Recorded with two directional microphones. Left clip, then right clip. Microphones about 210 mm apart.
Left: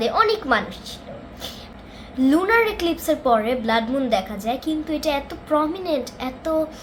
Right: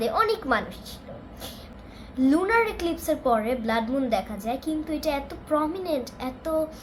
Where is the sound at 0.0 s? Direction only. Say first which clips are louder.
Left 5 dB; 5° left (ahead or behind).